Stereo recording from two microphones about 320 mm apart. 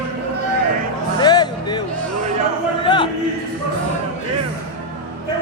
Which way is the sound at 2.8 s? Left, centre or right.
Centre.